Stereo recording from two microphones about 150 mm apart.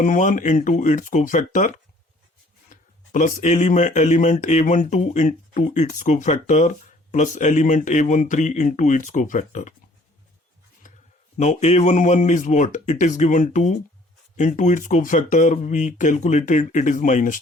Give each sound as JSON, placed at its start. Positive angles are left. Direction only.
{"t": 0.0, "sound": "speech", "side_deg": 60}
{"t": 11.3, "sound": "speech", "side_deg": 50}